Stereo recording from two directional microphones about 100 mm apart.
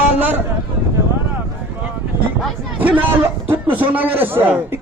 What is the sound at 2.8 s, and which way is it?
A man's voice, 15° right (ahead or behind).